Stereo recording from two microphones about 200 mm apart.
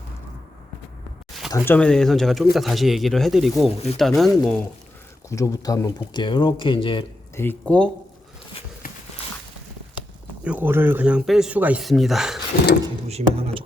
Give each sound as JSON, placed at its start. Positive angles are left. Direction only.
{"t": 1.5, "sound": "speech", "side_deg": 15}
{"t": 5.3, "sound": "speech", "side_deg": 15}
{"t": 7.6, "sound": "speech", "side_deg": 5}
{"t": 10.4, "sound": "speech", "side_deg": -10}
{"t": 13.1, "sound": "speech", "side_deg": -30}